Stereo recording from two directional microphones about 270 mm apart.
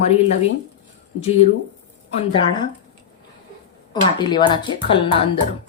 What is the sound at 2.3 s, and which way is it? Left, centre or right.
Speech, centre.